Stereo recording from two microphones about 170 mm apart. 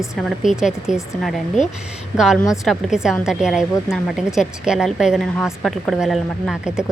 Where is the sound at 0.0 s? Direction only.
Centre (ahead or behind).